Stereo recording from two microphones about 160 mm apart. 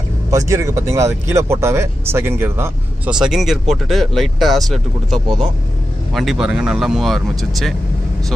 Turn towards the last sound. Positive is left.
turn(degrees=0)  # may be behind; listen again after turning